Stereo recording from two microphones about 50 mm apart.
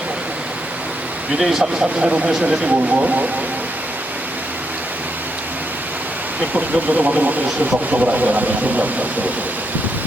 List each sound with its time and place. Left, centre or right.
1.4 s speech: centre; by 3.2 s right
6.5 s speech: right